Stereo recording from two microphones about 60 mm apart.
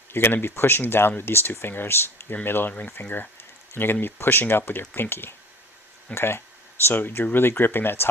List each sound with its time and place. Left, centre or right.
0.1 s speech: left